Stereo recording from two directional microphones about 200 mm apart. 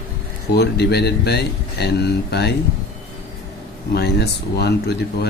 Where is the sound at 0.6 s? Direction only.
55° left (ahead or behind).